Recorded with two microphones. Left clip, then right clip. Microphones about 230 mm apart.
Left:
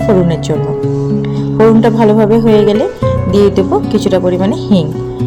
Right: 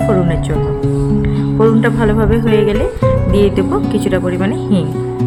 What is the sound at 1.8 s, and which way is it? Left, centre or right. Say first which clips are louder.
Speech: left 5 dB; centre.